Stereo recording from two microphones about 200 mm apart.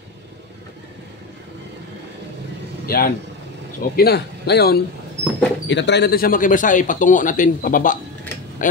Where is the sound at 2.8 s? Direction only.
50° left (ahead or behind).